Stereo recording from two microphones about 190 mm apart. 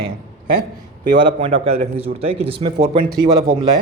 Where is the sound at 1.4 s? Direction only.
30° right (ahead or behind).